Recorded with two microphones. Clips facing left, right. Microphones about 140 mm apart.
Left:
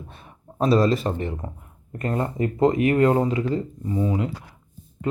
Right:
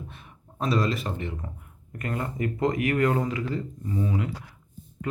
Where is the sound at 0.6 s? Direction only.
30° left (ahead or behind).